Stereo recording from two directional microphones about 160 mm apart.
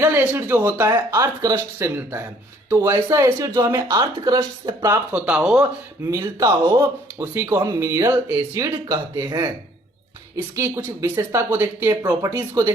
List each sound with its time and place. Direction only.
0.0 s speech: 15° right (ahead or behind)
5.1 s speech: 10° right (ahead or behind)
6.1 s speech: 20° right (ahead or behind)
10.5 s speech: 15° right (ahead or behind)